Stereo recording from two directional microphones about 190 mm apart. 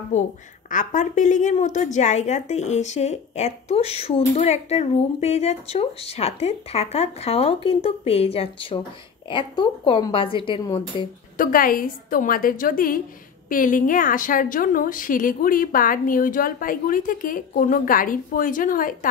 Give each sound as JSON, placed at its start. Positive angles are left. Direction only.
{"t": 0.1, "sound": "a woman's voice", "side_deg": 40}
{"t": 11.3, "sound": "a woman's voice", "side_deg": 45}